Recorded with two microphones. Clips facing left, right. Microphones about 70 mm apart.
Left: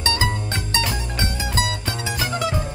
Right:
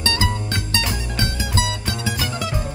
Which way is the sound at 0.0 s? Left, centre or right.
Left.